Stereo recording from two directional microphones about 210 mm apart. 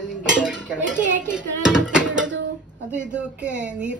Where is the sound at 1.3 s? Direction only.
5° right (ahead or behind).